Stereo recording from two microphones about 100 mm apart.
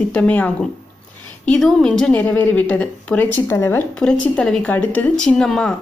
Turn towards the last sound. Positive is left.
turn(degrees=5)  # may be behind; listen again after turning